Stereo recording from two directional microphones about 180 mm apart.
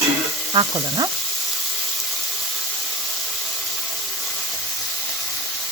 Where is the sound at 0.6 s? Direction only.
25° right (ahead or behind).